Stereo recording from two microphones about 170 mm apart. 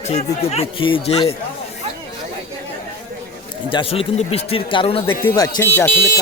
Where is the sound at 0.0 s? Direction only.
40° left (ahead or behind).